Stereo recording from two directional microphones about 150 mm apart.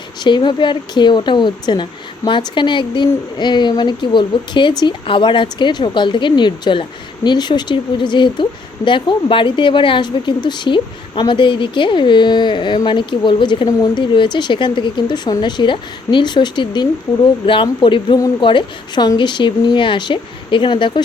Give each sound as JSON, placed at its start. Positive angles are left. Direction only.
{"t": 0.2, "sound": "a woman's voice", "side_deg": 30}